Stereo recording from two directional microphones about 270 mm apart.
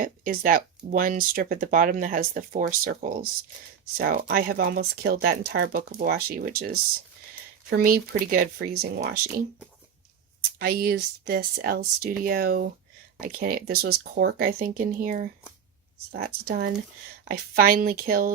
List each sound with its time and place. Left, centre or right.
0.0 s speech: right
7.7 s speech: right
10.6 s speech: right